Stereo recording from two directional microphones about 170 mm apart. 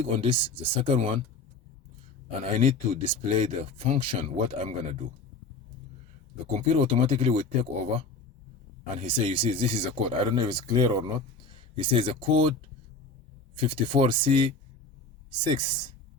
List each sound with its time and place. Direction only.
0.0 s speech: 35° right (ahead or behind)
2.4 s speech: 40° right (ahead or behind)
6.5 s speech: 35° right (ahead or behind)
13.6 s speech: 30° right (ahead or behind)